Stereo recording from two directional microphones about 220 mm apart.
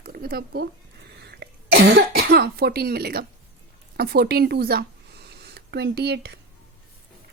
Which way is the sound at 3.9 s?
45° right (ahead or behind).